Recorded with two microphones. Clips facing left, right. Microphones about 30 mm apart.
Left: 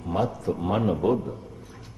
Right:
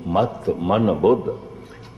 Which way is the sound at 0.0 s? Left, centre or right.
Right.